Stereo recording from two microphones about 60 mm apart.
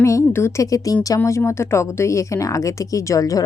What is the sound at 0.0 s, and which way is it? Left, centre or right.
Speech, left.